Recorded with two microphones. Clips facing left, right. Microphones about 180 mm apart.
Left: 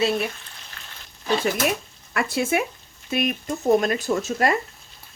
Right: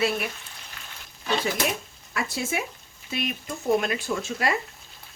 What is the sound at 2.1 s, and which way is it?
Speech, 60° left (ahead or behind).